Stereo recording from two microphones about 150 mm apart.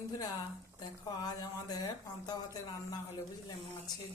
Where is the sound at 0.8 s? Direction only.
25° left (ahead or behind).